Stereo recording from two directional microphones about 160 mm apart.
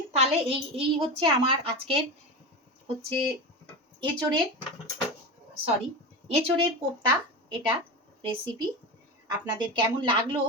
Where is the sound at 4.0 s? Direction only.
25° right (ahead or behind).